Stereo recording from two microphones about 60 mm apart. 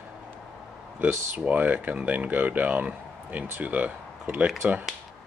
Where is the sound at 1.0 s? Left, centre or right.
Right.